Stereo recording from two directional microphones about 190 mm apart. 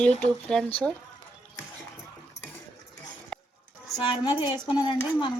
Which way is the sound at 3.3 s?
5° left (ahead or behind).